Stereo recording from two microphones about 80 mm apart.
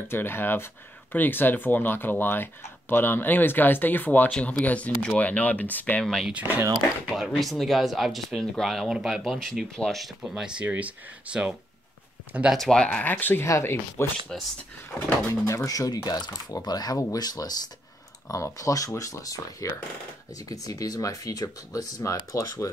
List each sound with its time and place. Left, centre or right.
0.1 s speech: left
6.0 s speech: centre
6.3 s speech: centre
7.2 s speech: centre
10.3 s speech: centre
12.5 s speech: centre
12.8 s speech: centre; by 14.0 s left
14.3 s speech: centre
15.4 s speech: left